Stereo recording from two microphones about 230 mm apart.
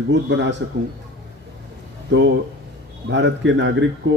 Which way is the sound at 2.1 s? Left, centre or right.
Right.